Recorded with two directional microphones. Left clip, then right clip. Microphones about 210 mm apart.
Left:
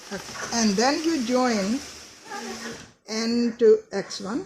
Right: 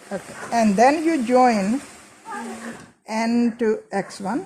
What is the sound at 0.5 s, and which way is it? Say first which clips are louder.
Speech: right 7 dB; 40° right (ahead or behind).